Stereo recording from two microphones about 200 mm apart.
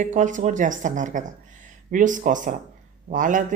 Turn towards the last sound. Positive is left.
turn(degrees=-40)  # may be behind; listen again after turning